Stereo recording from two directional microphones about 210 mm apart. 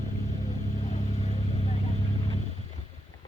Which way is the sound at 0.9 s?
30° left (ahead or behind).